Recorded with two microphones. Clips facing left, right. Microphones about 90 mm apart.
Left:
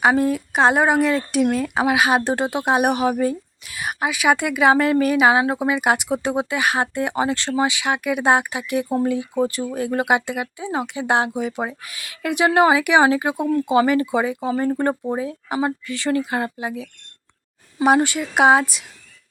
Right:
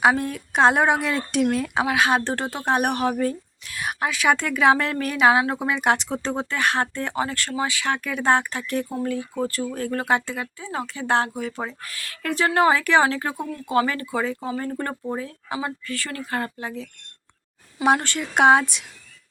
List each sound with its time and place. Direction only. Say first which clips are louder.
0.0 s speech: left 3 dB; 5° left (ahead or behind)